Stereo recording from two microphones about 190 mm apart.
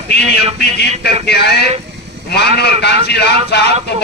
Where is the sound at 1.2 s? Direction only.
60° left (ahead or behind).